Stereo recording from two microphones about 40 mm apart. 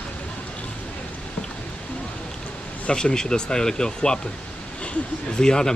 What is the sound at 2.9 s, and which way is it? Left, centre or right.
Speech, centre.